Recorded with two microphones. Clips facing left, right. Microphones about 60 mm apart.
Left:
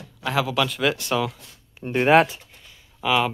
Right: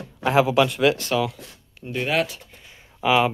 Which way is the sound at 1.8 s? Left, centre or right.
Left.